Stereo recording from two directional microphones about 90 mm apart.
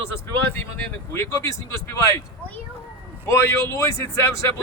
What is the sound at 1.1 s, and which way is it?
A man's voice, 30° left (ahead or behind).